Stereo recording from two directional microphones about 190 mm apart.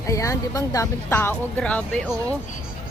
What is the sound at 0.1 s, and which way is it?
Speech, 15° left (ahead or behind).